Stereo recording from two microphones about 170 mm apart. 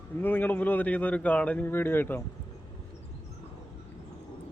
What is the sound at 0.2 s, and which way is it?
A man's voice, 10° left (ahead or behind).